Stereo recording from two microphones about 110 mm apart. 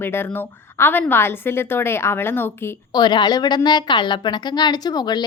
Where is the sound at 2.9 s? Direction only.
40° left (ahead or behind).